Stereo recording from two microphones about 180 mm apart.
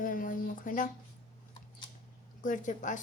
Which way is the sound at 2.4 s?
45° left (ahead or behind).